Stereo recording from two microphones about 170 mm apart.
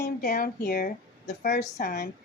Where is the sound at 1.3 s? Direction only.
45° left (ahead or behind).